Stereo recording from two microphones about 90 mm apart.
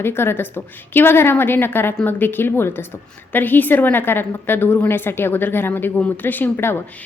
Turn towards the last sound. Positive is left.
turn(degrees=25)  # may be behind; listen again after turning